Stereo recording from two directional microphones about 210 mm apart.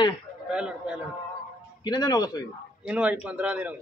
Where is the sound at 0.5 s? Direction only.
5° right (ahead or behind).